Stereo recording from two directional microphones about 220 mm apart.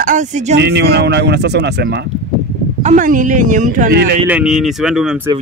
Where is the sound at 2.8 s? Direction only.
35° right (ahead or behind).